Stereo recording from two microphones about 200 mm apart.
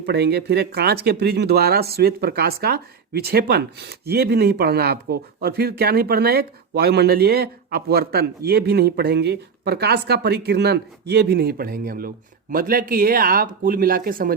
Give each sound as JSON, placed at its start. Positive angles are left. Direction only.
{"t": 0.0, "sound": "speech", "side_deg": -55}